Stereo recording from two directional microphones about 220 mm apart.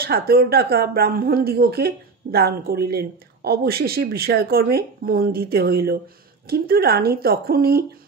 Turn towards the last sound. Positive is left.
turn(degrees=-45)  # may be behind; listen again after turning